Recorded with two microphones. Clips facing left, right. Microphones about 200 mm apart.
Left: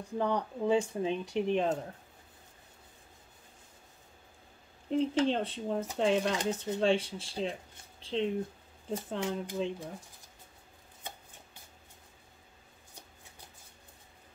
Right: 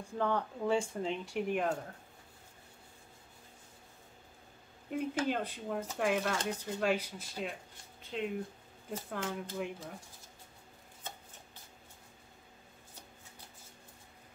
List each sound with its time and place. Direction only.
0.2 s speech: 15° left (ahead or behind)
4.8 s speech: 25° left (ahead or behind)
9.2 s speech: 20° left (ahead or behind)